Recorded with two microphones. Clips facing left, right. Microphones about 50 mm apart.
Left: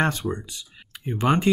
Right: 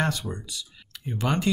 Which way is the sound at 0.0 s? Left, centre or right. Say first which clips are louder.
Left 4 dB; left.